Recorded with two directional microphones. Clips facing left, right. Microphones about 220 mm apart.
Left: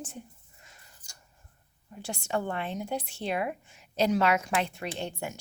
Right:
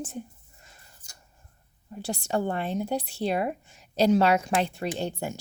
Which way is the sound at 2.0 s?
35° right (ahead or behind).